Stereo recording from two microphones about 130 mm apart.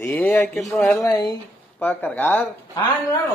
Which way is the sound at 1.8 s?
15° left (ahead or behind).